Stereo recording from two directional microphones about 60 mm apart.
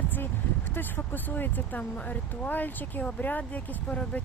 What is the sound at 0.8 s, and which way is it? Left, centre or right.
Speech, left.